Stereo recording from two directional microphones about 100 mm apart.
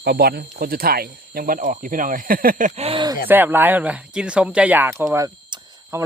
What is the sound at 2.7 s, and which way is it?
Speech, 85° right.